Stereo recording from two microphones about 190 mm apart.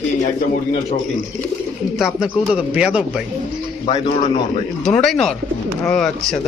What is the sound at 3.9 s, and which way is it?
Speech, 30° left (ahead or behind).